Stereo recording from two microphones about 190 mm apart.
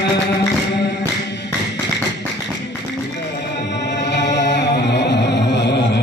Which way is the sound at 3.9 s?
65° left (ahead or behind).